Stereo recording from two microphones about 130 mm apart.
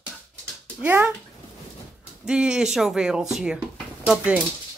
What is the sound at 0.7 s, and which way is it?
Speech, 10° right (ahead or behind).